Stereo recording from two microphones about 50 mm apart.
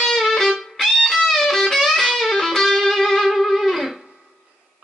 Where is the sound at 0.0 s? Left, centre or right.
Centre.